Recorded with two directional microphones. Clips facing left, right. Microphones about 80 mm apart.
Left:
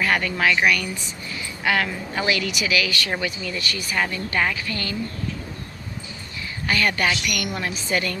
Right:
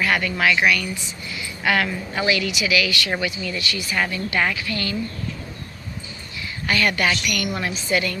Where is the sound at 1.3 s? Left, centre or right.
Left.